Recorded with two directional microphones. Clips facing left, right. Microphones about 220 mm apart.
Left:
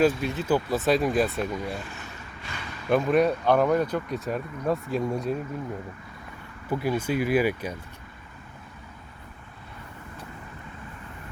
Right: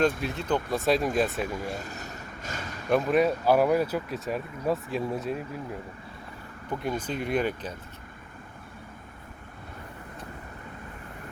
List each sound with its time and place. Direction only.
0.0 s speech: centre (ahead or behind)
1.8 s vehicle: 40° right (ahead or behind)
2.9 s speech: centre (ahead or behind)
6.7 s speech: 5° left (ahead or behind)